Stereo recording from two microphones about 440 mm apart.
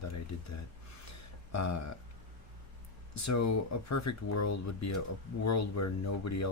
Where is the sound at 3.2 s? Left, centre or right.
Left.